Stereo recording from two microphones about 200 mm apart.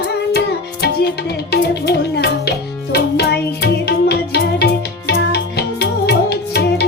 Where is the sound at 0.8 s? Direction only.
55° left (ahead or behind).